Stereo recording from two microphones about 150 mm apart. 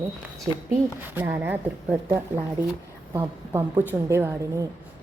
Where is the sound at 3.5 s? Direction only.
15° right (ahead or behind).